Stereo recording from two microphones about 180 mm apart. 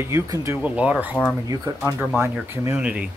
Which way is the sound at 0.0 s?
15° right (ahead or behind).